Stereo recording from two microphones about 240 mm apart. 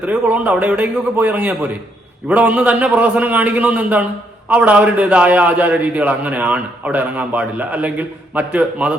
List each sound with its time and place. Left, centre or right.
0.0 s a man's voice: centre